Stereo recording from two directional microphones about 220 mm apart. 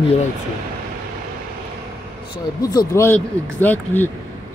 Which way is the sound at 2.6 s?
15° left (ahead or behind).